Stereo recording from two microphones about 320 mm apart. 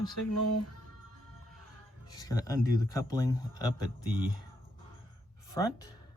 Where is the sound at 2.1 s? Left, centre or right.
Centre.